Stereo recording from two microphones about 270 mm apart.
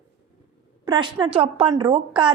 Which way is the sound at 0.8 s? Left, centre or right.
Centre.